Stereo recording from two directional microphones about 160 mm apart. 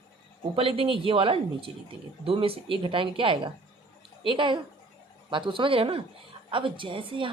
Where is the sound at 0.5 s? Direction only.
35° right (ahead or behind).